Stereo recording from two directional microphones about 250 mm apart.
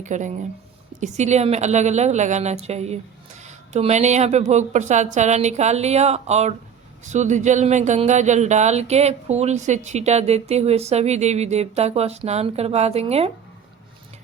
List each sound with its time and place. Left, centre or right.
0.0 s speech: right